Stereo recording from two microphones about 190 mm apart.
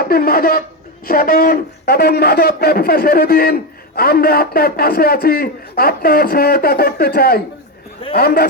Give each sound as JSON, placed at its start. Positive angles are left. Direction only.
{"t": 0.0, "sound": "speech", "side_deg": 50}